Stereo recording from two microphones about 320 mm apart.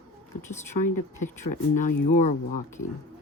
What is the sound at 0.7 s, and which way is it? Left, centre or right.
Speech, left.